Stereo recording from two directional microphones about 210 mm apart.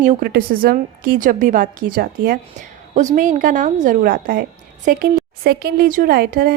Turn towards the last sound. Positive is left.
turn(degrees=-45)  # may be behind; listen again after turning